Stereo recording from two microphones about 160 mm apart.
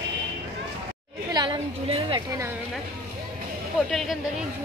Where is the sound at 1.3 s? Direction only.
30° right (ahead or behind).